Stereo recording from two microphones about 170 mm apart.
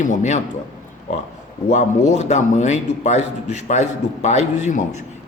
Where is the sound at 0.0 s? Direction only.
45° left (ahead or behind).